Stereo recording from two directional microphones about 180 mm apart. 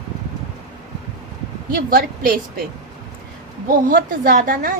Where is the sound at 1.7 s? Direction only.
55° right (ahead or behind).